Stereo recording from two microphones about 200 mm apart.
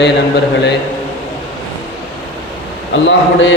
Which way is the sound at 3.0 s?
70° left (ahead or behind).